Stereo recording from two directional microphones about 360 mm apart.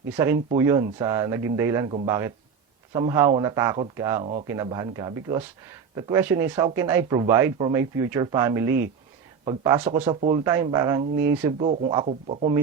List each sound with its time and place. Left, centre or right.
0.2 s speech: centre